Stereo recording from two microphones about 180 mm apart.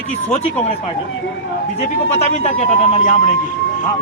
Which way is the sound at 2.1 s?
35° left (ahead or behind).